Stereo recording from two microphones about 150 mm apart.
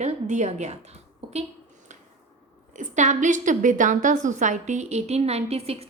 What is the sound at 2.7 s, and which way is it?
A woman's voice, 55° right (ahead or behind).